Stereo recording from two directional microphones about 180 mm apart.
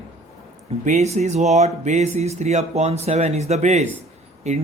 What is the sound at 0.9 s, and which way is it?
A man's voice, 40° right (ahead or behind).